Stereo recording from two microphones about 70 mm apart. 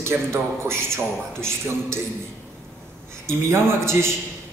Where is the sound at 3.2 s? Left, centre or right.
Right.